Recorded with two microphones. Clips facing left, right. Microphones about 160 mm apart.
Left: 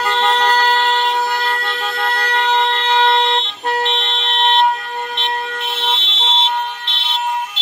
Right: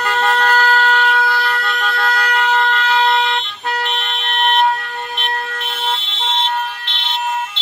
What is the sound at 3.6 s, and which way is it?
Vehicle, 40° left (ahead or behind).